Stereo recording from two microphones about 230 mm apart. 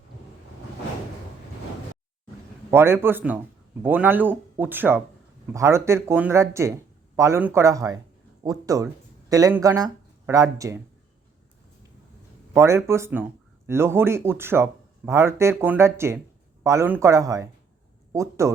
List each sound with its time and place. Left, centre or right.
2.6 s speech: centre
12.5 s speech: centre